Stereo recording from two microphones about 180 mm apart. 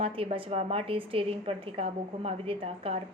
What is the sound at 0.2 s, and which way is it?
A woman's voice, 30° right (ahead or behind).